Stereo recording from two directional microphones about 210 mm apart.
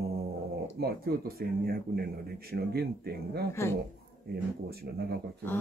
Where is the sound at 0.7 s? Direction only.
45° right (ahead or behind).